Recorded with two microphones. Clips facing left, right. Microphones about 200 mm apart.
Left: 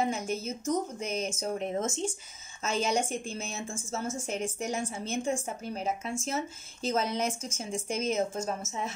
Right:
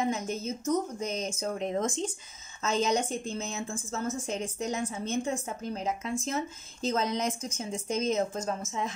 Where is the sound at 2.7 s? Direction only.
10° left (ahead or behind).